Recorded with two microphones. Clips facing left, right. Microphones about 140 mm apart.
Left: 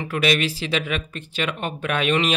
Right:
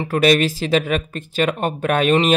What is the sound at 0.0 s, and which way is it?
Speech, 40° right (ahead or behind).